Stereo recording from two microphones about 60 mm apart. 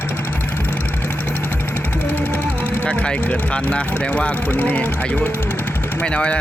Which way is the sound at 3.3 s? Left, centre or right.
Left.